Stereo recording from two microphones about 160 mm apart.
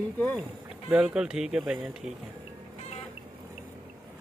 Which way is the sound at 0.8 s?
5° right (ahead or behind).